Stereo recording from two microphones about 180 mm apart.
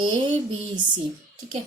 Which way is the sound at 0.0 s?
25° right (ahead or behind).